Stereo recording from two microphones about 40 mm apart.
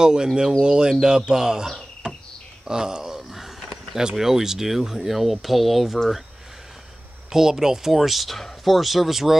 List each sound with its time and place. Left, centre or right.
0.0 s speech: centre
2.0 s insect: right
2.6 s a sound: centre
4.2 s speech: centre
7.3 s speech: centre